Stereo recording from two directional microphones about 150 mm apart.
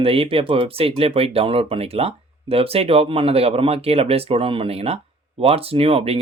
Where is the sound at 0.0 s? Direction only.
40° right (ahead or behind).